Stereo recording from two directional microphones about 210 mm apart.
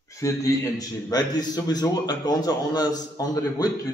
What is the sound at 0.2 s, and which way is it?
A man's voice, 15° left (ahead or behind).